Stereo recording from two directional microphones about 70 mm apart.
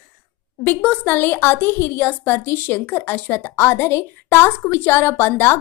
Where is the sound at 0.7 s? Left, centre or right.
Centre.